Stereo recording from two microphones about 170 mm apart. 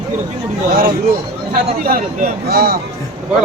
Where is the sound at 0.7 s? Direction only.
60° right (ahead or behind).